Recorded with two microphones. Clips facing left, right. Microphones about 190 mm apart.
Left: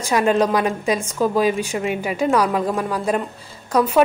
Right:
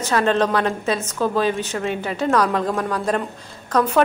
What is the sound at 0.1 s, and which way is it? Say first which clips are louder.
A woman's voice: left 2 dB; 10° left (ahead or behind).